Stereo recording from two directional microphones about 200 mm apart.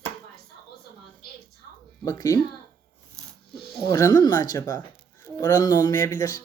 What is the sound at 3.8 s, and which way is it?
A woman's voice, 15° left (ahead or behind).